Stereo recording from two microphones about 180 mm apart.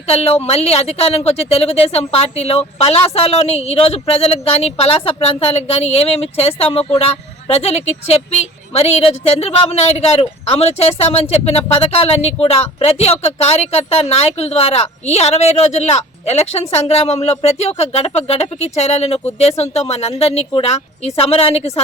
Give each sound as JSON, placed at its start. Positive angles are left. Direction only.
{"t": 0.1, "sound": "a woman's voice", "side_deg": 35}